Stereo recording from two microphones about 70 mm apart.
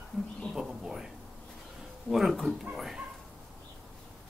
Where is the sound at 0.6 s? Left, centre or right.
Centre.